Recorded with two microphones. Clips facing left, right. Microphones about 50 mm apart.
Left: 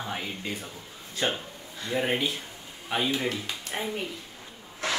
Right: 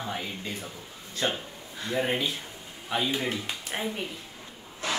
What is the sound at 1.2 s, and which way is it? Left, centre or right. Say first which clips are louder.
Speech: left 1 dB; left.